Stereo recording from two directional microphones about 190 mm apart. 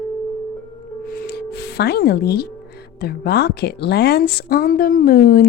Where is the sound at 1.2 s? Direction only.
60° left (ahead or behind).